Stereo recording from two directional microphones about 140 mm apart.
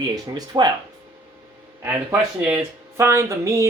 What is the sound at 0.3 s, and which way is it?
Speech, 30° right (ahead or behind).